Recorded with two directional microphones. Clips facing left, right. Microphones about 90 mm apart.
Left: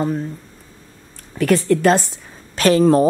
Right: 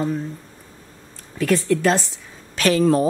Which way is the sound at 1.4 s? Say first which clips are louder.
Left 3 dB; 55° left (ahead or behind).